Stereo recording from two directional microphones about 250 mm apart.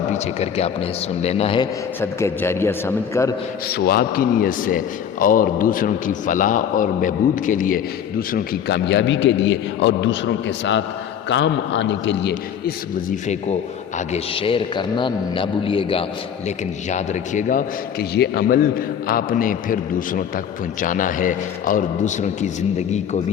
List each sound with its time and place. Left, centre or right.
0.1 s a man's voice: left
2.0 s a man's voice: centre
3.7 s a man's voice: left